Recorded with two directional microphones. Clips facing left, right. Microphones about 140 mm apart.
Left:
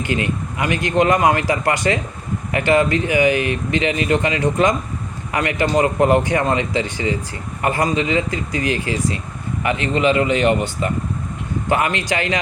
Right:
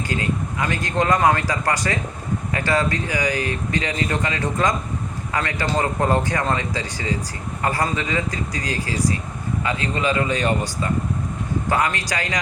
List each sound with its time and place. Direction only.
0.0 s speech: 20° left (ahead or behind)